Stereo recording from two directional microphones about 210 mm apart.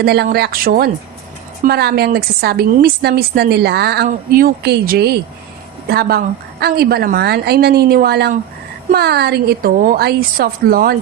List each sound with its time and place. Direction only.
0.0 s a woman's voice: 50° right (ahead or behind)